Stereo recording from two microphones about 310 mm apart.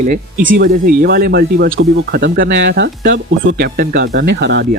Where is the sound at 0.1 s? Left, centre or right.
Right.